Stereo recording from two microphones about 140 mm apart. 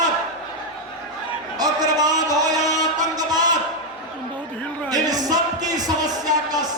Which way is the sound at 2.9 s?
25° right (ahead or behind).